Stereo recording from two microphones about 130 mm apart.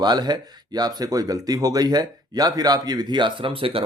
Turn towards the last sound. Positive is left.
turn(degrees=-45)  # may be behind; listen again after turning